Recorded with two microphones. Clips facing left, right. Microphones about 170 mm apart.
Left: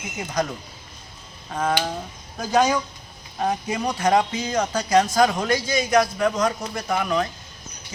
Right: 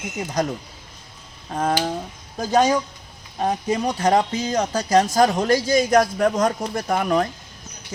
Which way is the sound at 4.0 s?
35° right (ahead or behind).